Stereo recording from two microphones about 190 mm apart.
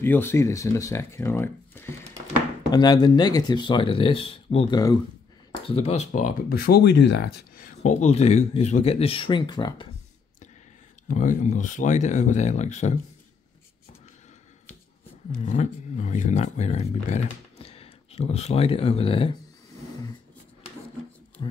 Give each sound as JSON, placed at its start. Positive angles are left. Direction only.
{"t": 0.0, "sound": "speech", "side_deg": 10}
{"t": 5.7, "sound": "speech", "side_deg": 35}
{"t": 11.1, "sound": "speech", "side_deg": 45}
{"t": 15.3, "sound": "speech", "side_deg": 40}
{"t": 21.4, "sound": "speech", "side_deg": 25}